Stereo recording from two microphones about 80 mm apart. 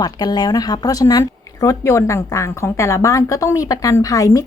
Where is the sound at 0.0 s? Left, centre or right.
Left.